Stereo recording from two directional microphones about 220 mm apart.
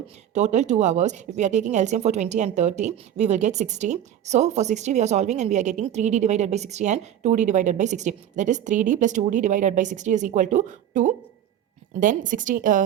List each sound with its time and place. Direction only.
0.3 s a woman's voice: 30° right (ahead or behind)